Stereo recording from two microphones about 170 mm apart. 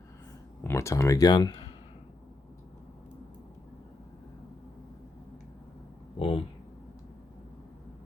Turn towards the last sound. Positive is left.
turn(degrees=35)  # may be behind; listen again after turning